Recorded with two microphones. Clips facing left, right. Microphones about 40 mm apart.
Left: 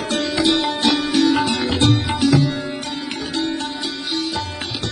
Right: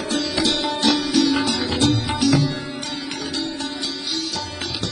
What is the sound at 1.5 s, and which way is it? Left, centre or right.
Sitar, left.